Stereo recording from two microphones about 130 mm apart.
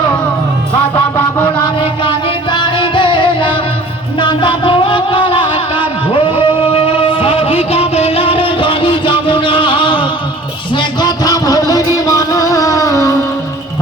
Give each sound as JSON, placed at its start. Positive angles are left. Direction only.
{"t": 1.6, "sound": "music", "side_deg": 40}